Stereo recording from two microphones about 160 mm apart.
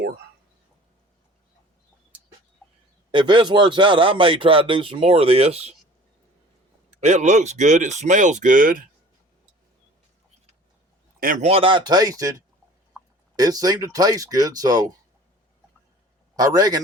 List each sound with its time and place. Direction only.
3.1 s speech: 30° right (ahead or behind)
6.9 s speech: 45° right (ahead or behind)
11.4 s speech: 35° right (ahead or behind)
16.3 s speech: 25° right (ahead or behind)